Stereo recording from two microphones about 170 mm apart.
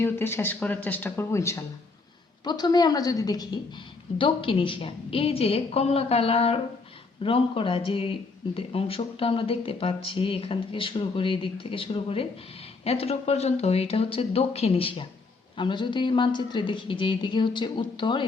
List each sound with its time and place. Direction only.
0.0 s speech: 15° left (ahead or behind)